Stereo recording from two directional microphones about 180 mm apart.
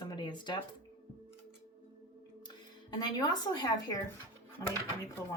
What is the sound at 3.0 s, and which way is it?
Speech, 20° left (ahead or behind).